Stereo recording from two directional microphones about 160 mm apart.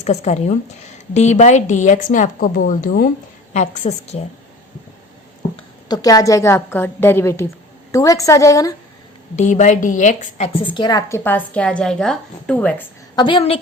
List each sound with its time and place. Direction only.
0.0 s a woman's voice: 45° left (ahead or behind); by 3.1 s 60° left (ahead or behind)
3.5 s a woman's voice: 45° left (ahead or behind)
5.5 s a woman's voice: 25° left (ahead or behind)
9.3 s a woman's voice: 45° left (ahead or behind)
10.7 s a woman's voice: 25° left (ahead or behind)
11.2 s a woman's voice: 10° left (ahead or behind)
13.1 s a woman's voice: 30° left (ahead or behind)